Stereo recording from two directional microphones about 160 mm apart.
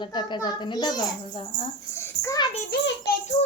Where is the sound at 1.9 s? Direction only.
15° left (ahead or behind).